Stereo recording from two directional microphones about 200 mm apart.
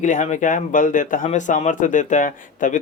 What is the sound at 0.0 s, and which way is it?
Speech, 40° left (ahead or behind).